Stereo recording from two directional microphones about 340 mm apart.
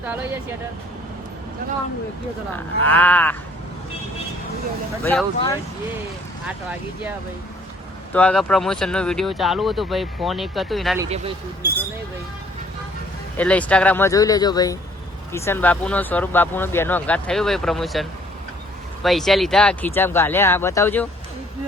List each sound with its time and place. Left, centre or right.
2.8 s speech: centre
5.0 s speech: centre
8.1 s speech: centre
11.0 s speech: centre
13.3 s speech: centre